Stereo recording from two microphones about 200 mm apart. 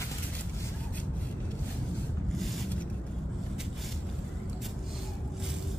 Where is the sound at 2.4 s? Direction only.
Centre (ahead or behind).